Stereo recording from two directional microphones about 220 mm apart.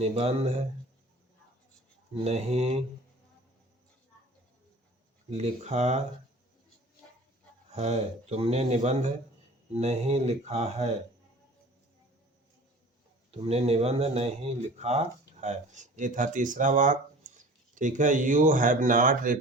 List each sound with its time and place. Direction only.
0.0 s a man's voice: 30° right (ahead or behind)
2.1 s a man's voice: 30° right (ahead or behind)
5.3 s speech: 30° right (ahead or behind)
7.7 s a man's voice: 30° right (ahead or behind)
13.3 s speech: 25° right (ahead or behind)